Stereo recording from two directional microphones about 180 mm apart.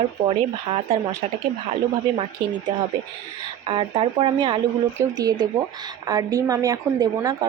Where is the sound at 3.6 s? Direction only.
30° right (ahead or behind).